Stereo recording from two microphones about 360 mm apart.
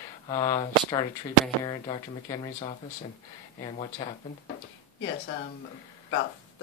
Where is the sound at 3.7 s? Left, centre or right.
Centre.